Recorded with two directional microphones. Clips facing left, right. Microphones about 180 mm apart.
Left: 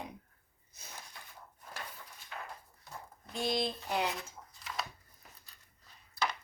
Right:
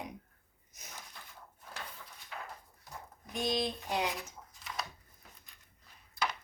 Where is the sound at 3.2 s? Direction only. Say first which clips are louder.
Even; 15° right (ahead or behind).